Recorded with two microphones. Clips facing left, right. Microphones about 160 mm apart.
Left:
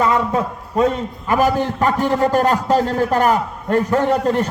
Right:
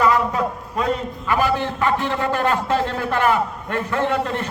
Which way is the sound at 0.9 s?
40° left (ahead or behind).